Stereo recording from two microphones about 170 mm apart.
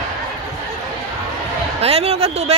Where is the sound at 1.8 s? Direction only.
35° right (ahead or behind).